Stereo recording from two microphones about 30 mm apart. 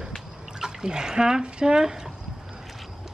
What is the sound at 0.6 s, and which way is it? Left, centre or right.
Speech, right.